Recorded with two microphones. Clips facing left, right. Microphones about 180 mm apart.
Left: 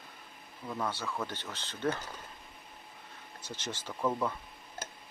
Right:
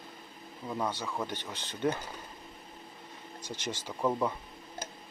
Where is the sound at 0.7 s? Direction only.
15° right (ahead or behind).